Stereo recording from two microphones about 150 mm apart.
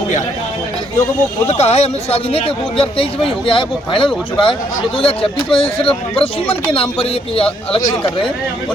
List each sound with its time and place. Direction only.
1.5 s speech: 45° left (ahead or behind)